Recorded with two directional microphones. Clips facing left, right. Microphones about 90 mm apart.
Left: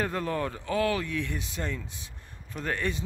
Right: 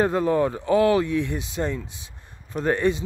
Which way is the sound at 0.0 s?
20° right (ahead or behind).